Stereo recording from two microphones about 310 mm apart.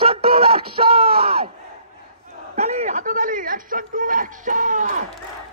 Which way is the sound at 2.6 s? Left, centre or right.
Right.